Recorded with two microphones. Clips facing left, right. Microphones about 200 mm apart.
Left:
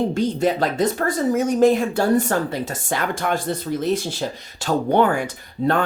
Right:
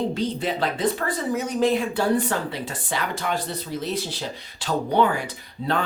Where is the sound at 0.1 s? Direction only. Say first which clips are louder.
Left 5 dB; 45° left (ahead or behind).